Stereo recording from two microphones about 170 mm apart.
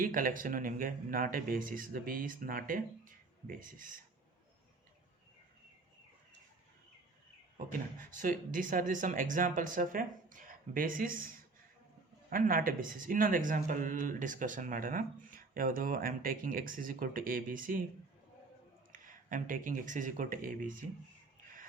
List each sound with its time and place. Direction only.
0.0 s speech: 55° right (ahead or behind)
7.7 s speech: 55° right (ahead or behind)
18.9 s speech: 50° right (ahead or behind)